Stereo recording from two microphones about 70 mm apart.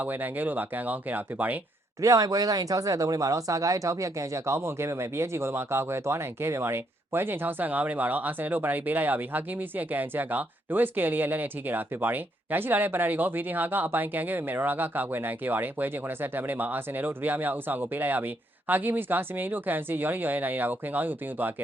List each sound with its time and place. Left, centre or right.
0.0 s speech: right
2.0 s speech: right